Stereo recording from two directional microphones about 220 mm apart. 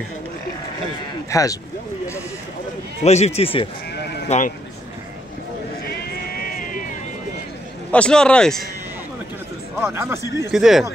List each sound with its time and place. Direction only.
1.3 s speech: 15° left (ahead or behind)
3.0 s speech: 30° left (ahead or behind)
5.9 s a sound: 45° left (ahead or behind)
7.9 s a man's voice: 5° left (ahead or behind)
9.8 s a man's voice: 10° right (ahead or behind)